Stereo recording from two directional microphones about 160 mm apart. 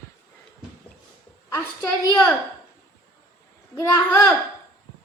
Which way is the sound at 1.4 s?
20° left (ahead or behind).